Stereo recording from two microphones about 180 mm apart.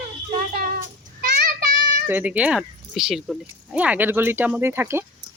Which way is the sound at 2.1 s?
10° right (ahead or behind).